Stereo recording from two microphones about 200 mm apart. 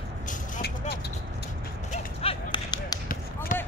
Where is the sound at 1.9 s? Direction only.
30° left (ahead or behind).